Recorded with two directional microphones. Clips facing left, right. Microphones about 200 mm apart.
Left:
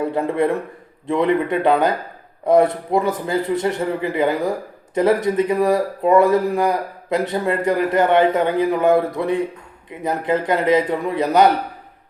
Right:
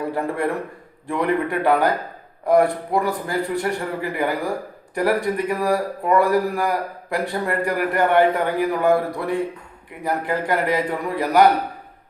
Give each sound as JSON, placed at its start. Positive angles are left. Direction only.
{"t": 0.0, "sound": "a man's voice", "side_deg": 20}